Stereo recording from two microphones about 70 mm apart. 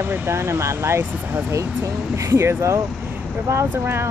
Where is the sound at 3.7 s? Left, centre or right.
Right.